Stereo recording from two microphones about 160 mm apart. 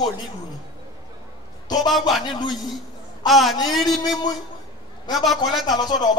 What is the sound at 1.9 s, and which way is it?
Speech, centre (ahead or behind).